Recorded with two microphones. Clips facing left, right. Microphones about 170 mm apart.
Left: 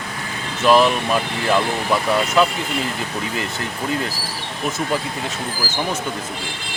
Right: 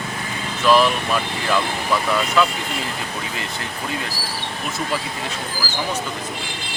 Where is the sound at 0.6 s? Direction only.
20° left (ahead or behind).